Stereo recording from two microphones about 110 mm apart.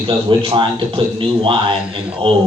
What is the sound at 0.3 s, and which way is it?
A man's voice, 50° right (ahead or behind).